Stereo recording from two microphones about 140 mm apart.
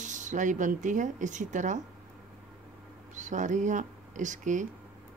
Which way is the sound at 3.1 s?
60° right (ahead or behind).